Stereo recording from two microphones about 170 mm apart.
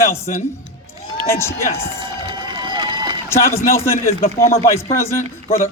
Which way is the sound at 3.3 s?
15° left (ahead or behind).